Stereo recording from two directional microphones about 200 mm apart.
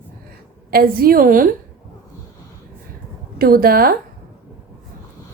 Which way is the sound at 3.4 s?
45° right (ahead or behind).